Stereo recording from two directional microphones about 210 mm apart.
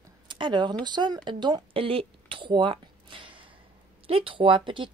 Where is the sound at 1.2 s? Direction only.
20° right (ahead or behind).